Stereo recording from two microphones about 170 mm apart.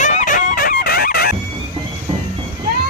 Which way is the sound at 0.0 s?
45° left (ahead or behind).